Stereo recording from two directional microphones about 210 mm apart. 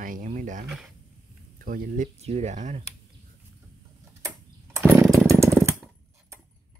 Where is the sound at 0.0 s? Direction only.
40° right (ahead or behind).